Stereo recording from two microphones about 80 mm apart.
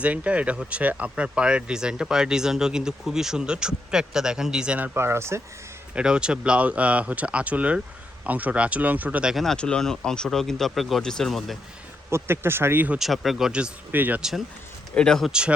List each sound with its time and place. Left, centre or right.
0.0 s speech: centre
4.9 s speech: right
5.9 s speech: centre
9.3 s speech: centre
12.1 s speech: right
13.0 s speech: centre
13.9 s speech: right
14.2 s speech: centre
14.9 s speech: centre
15.3 s speech: centre